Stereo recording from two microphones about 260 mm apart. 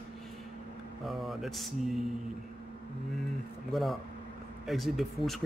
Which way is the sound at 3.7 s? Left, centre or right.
Centre.